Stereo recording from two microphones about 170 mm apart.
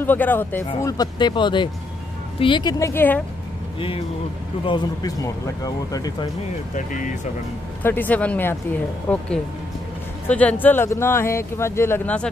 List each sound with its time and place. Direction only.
0.0 s speech: 10° left (ahead or behind)
0.8 s speech: 25° left (ahead or behind)
4.6 s speech: 25° left (ahead or behind)
6.7 s speech: 50° left (ahead or behind)
7.8 s speech: 10° left (ahead or behind)